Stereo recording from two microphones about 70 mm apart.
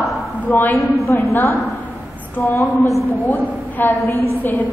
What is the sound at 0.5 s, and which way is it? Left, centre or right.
Speech, left.